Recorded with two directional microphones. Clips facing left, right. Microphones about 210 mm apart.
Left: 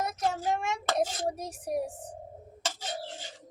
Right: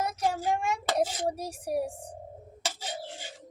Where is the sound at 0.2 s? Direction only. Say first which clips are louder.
Right 1 dB; 10° right (ahead or behind).